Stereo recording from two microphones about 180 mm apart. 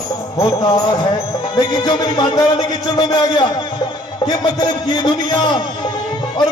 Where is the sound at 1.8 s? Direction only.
20° left (ahead or behind).